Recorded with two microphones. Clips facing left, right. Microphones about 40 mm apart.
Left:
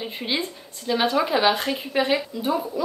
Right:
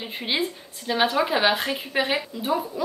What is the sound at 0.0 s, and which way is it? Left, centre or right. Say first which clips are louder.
Speech: right 1 dB; centre.